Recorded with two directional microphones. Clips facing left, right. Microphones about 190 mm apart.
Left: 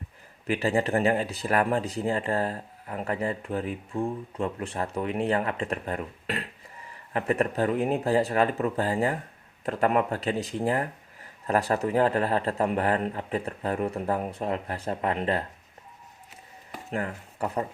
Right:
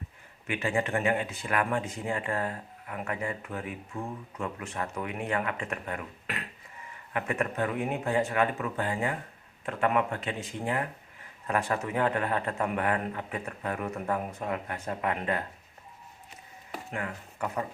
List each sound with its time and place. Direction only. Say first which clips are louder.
0.4 s speech: left 4 dB; 35° left (ahead or behind)
16.9 s speech: left 6 dB; 35° left (ahead or behind)